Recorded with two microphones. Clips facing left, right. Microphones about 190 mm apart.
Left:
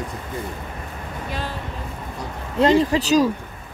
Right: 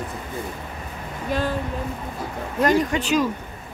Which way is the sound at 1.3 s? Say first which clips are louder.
Right 7 dB; 50° right (ahead or behind).